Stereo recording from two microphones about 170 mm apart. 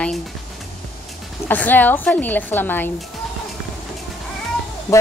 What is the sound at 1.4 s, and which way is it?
A woman's voice, 10° left (ahead or behind).